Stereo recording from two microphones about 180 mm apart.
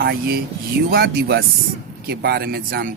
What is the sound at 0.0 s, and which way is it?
Speech, 60° right (ahead or behind).